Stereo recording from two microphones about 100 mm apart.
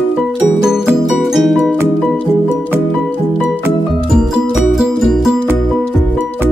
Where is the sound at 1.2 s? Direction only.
Centre (ahead or behind).